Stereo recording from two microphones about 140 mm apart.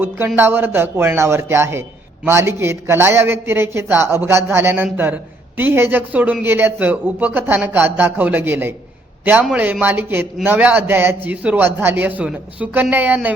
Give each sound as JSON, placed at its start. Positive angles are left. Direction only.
{"t": 0.3, "sound": "a man's voice", "side_deg": -15}